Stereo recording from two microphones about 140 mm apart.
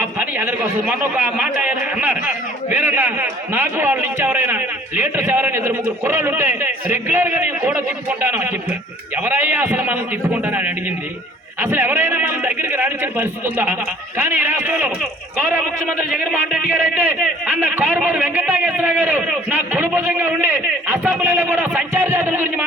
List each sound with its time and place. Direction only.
0.0 s a man's voice: 10° right (ahead or behind)